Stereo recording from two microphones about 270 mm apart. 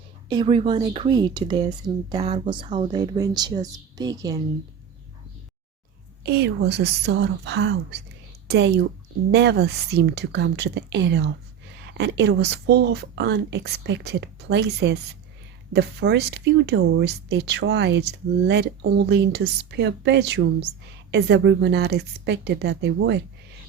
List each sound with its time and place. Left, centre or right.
0.3 s speech: centre
6.2 s speech: right